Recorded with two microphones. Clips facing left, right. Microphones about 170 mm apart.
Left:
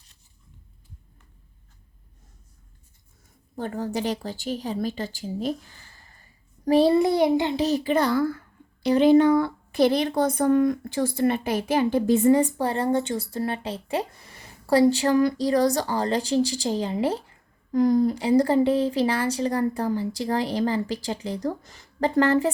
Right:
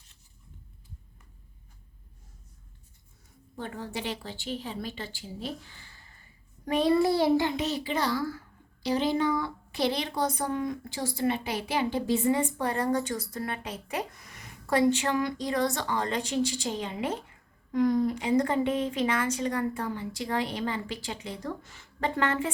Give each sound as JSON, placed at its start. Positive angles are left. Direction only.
{"t": 3.5, "sound": "a woman's voice", "side_deg": 40}
{"t": 6.7, "sound": "a sound", "side_deg": 30}
{"t": 7.5, "sound": "a woman's voice", "side_deg": 40}